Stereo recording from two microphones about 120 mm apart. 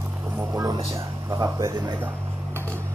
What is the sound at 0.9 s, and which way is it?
Speech, 30° right (ahead or behind).